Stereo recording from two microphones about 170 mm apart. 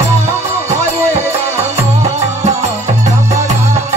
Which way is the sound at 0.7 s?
40° right (ahead or behind).